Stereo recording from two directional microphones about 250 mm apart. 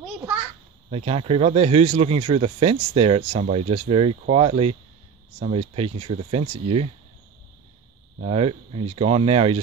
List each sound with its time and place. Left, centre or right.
0.8 s speech: right
8.2 s speech: right